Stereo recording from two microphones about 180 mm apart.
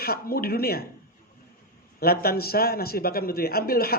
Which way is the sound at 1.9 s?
55° left (ahead or behind).